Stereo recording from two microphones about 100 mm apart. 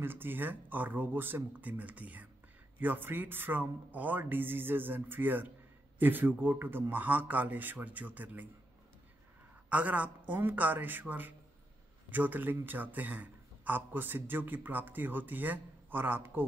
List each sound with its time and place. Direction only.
0.0 s a man's voice: 20° right (ahead or behind)
9.7 s a man's voice: 15° right (ahead or behind)